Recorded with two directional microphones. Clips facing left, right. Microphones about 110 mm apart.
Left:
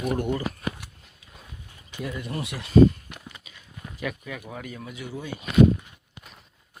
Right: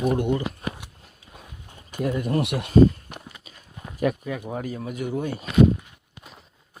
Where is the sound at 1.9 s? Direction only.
45° right (ahead or behind).